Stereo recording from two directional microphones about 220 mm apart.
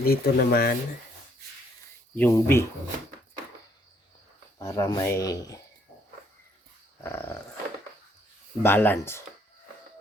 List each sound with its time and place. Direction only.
0.0 s speech: 45° left (ahead or behind)
2.1 s speech: 10° left (ahead or behind)
4.5 s speech: 15° left (ahead or behind)
7.0 s speech: 10° left (ahead or behind)
8.6 s speech: 10° left (ahead or behind)